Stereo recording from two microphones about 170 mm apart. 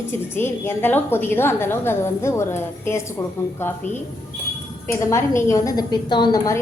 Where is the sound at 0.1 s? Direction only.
15° left (ahead or behind).